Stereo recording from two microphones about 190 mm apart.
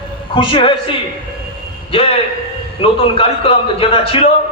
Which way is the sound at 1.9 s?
30° left (ahead or behind).